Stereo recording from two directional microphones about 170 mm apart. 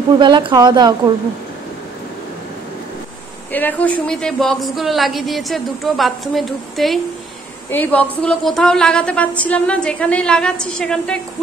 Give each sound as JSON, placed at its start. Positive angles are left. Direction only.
{"t": 0.2, "sound": "speech", "side_deg": -30}
{"t": 3.5, "sound": "a woman's voice", "side_deg": 10}